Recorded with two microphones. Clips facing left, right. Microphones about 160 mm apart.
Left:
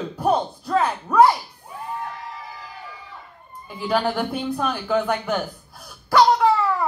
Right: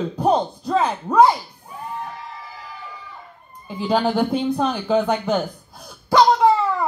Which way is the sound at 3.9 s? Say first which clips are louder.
Right 3 dB; 20° right (ahead or behind).